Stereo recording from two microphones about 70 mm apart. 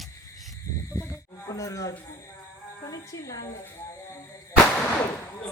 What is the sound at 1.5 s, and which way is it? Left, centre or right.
Speech, left.